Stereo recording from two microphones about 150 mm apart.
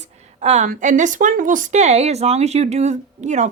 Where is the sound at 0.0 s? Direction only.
50° right (ahead or behind).